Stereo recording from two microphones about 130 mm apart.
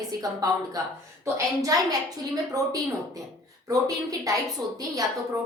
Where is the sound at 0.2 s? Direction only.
30° right (ahead or behind).